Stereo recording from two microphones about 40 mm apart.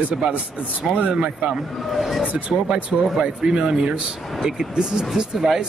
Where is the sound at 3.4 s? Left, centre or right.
Centre.